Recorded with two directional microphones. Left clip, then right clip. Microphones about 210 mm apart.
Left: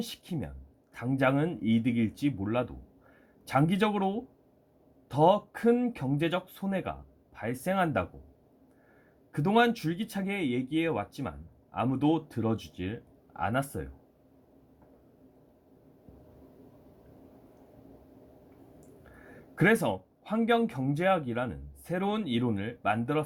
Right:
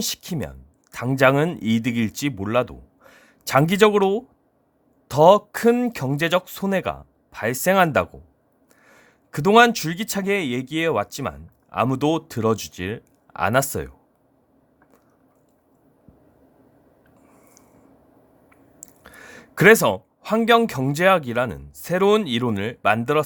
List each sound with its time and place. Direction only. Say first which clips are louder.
0.0 s speech: right 10 dB; 50° right (ahead or behind)
9.3 s speech: right 11 dB; 50° right (ahead or behind)
19.5 s speech: right 12 dB; 50° right (ahead or behind)